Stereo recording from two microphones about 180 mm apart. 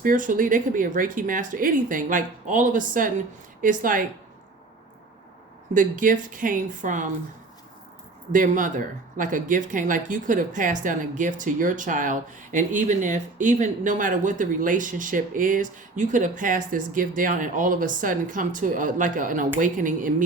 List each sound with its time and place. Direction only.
0.0 s speech: 50° right (ahead or behind)
5.7 s speech: 50° right (ahead or behind)
8.3 s speech: 45° right (ahead or behind)